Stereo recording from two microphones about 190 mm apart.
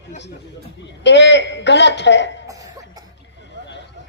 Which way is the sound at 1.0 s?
70° left (ahead or behind).